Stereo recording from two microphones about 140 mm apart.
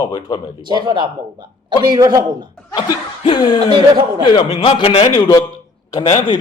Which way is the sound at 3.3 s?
30° left (ahead or behind).